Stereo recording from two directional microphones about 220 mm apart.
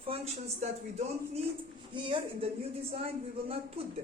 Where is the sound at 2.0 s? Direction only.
25° right (ahead or behind).